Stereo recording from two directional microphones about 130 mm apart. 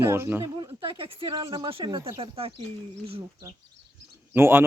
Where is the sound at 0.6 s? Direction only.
35° right (ahead or behind).